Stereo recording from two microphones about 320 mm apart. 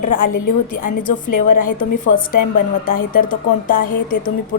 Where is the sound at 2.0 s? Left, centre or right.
Left.